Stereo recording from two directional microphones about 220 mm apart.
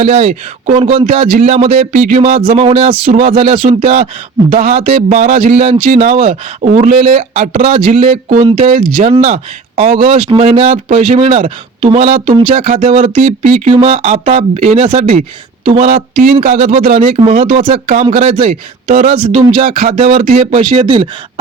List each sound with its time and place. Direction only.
0.0 s speech: 25° right (ahead or behind)
4.5 s speech: 40° right (ahead or behind); by 5.8 s 25° right (ahead or behind)
5.8 s speech: 40° right (ahead or behind)
8.4 s speech: 25° right (ahead or behind)
8.8 s speech: 40° right (ahead or behind)
9.2 s speech: 25° right (ahead or behind)
12.7 s speech: 40° right (ahead or behind); by 21.1 s 20° right (ahead or behind)